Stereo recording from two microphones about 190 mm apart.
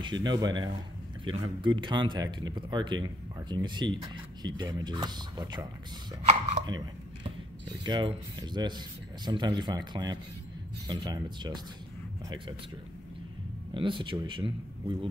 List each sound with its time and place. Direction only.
0.0 s speech: 25° right (ahead or behind)
7.8 s speech: 25° right (ahead or behind)
13.7 s speech: 25° right (ahead or behind)